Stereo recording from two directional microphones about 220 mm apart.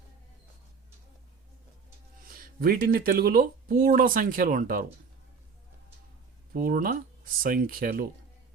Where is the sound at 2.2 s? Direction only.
40° right (ahead or behind).